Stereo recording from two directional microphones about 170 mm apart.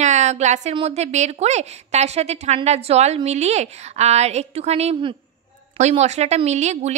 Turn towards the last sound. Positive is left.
turn(degrees=-40)  # may be behind; listen again after turning